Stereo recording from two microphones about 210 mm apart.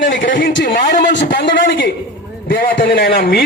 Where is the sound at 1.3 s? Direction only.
55° left (ahead or behind).